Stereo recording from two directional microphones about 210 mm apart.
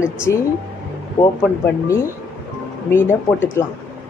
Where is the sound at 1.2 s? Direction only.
20° left (ahead or behind).